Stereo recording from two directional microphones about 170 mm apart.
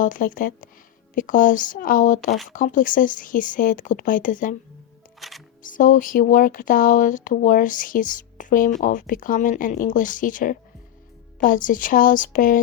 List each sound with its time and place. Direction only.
0.0 s speech: 50° left (ahead or behind)
5.2 s music: centre (ahead or behind)
5.6 s speech: 50° left (ahead or behind)